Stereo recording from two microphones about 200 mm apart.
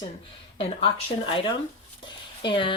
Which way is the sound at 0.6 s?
25° left (ahead or behind).